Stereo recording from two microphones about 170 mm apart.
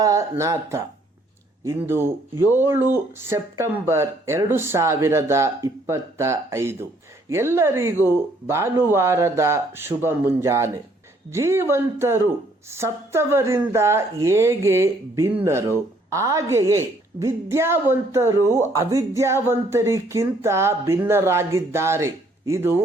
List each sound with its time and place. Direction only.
0.0 s speech: 20° right (ahead or behind)